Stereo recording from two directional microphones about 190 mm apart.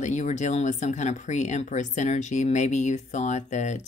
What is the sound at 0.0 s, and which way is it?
Speech, 40° left (ahead or behind).